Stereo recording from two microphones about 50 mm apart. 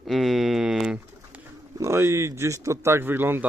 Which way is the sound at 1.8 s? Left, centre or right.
Right.